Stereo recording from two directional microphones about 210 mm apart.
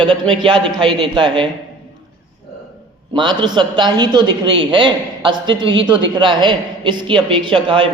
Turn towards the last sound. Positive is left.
turn(degrees=-25)  # may be behind; listen again after turning